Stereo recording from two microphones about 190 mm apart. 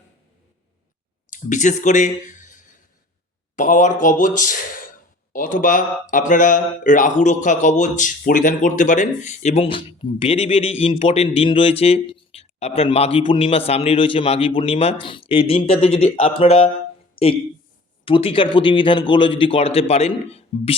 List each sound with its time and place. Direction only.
1.3 s speech: 40° left (ahead or behind)
18.0 s a man's voice: 30° left (ahead or behind)